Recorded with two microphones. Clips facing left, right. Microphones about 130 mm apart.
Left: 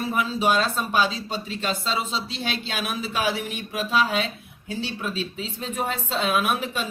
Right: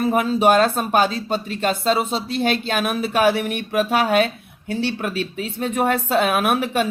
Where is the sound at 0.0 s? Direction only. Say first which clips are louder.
Right 7 dB; 55° right (ahead or behind).